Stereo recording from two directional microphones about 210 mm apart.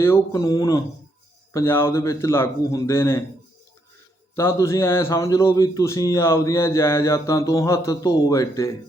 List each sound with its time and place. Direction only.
0.0 s a man's voice: 15° left (ahead or behind)
4.4 s a man's voice: 15° left (ahead or behind)